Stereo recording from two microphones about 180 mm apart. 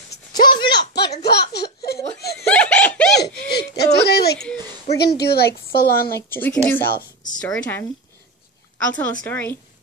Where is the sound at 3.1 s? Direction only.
65° left (ahead or behind).